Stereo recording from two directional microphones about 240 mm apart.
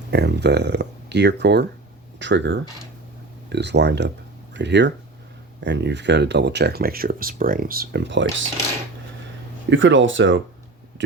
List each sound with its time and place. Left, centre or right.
0.1 s speech: right
9.6 s speech: right